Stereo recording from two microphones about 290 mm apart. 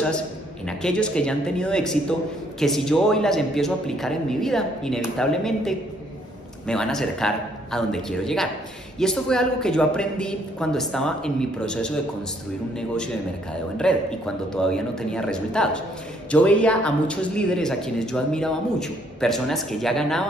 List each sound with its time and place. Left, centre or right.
0.7 s speech: centre